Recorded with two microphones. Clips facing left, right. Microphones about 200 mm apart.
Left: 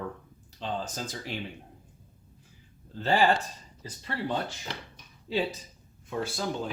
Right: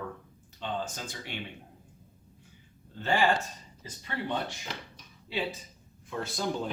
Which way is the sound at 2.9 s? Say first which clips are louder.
Left 3 dB; 35° left (ahead or behind).